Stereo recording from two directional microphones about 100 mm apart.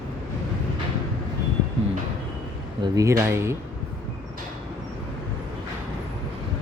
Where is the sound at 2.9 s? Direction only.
30° right (ahead or behind).